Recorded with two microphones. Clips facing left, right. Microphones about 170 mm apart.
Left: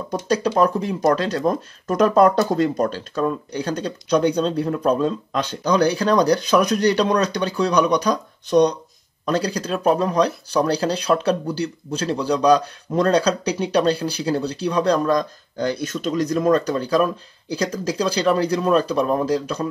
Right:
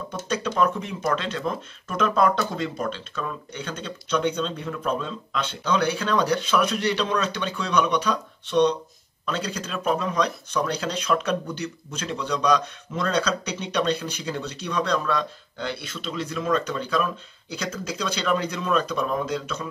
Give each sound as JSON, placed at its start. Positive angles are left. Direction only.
{"t": 0.3, "sound": "speech", "side_deg": 35}